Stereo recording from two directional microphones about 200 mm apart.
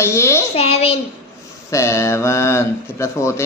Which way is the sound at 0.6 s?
30° left (ahead or behind).